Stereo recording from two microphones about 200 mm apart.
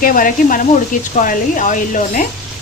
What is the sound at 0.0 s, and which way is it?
Speech, 45° left (ahead or behind).